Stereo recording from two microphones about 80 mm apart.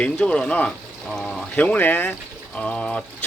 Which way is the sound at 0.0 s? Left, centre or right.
Centre.